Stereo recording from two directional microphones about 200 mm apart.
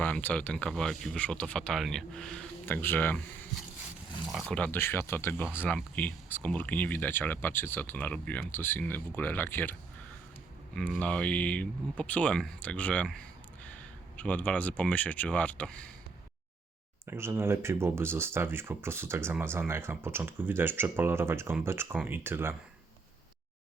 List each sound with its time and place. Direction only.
0.0 s speech: 10° left (ahead or behind)
4.3 s speech: centre (ahead or behind)
10.8 s speech: 5° left (ahead or behind)
14.2 s speech: 5° left (ahead or behind)
17.1 s speech: 10° right (ahead or behind)